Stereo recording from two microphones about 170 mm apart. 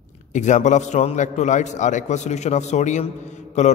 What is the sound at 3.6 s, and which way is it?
Mantra, 40° left (ahead or behind).